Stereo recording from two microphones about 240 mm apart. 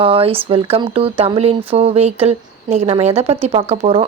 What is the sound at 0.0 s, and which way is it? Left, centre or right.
Speech, right.